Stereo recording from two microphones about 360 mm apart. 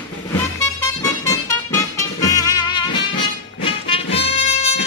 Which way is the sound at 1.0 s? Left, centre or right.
Centre.